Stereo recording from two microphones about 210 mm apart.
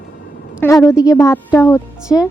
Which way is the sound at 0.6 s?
10° left (ahead or behind).